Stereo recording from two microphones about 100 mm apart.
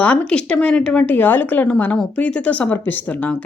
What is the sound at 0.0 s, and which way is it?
Speech, 10° left (ahead or behind).